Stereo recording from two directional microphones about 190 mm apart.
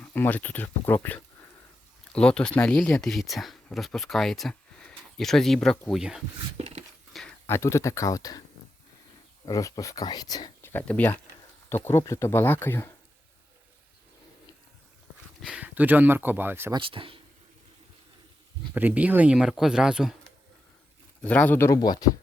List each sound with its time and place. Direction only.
0.0 s speech: 10° left (ahead or behind)
6.6 s a sound: 35° right (ahead or behind)
7.1 s a sound: centre (ahead or behind)
7.4 s speech: 15° left (ahead or behind)
9.5 s speech: 20° left (ahead or behind)
15.4 s speech: 5° right (ahead or behind)
16.7 s speech: 25° right (ahead or behind)
18.7 s speech: 10° right (ahead or behind)
21.2 s speech: 10° left (ahead or behind)